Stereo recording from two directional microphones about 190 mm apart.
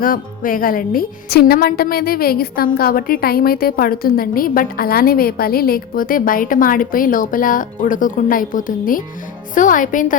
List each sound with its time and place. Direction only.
0.0 s a woman's voice: 45° left (ahead or behind)